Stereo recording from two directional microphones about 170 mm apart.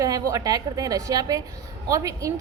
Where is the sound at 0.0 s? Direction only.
20° right (ahead or behind).